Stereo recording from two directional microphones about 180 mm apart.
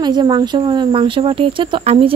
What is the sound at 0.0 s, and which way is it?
Speech, 25° right (ahead or behind).